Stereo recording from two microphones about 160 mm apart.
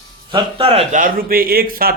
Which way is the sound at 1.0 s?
60° right (ahead or behind).